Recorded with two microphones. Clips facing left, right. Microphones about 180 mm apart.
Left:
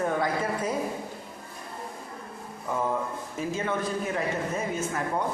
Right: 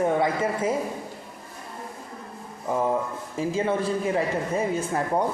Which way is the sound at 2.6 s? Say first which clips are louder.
Right 4 dB; 30° right (ahead or behind).